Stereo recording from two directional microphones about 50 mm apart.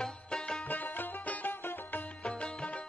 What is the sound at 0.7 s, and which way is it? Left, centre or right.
Music, left.